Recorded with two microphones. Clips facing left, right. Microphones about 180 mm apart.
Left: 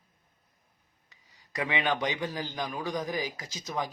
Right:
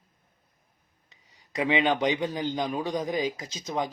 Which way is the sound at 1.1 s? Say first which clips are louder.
Right 4 dB; 20° right (ahead or behind).